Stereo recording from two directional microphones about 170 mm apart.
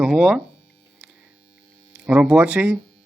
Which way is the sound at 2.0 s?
5° right (ahead or behind).